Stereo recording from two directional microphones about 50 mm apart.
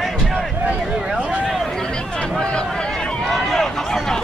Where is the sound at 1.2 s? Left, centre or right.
Right.